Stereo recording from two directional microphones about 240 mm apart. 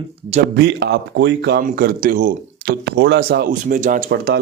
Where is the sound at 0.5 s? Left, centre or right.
Right.